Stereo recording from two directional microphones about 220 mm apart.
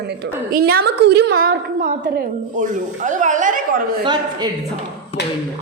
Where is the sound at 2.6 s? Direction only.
35° right (ahead or behind).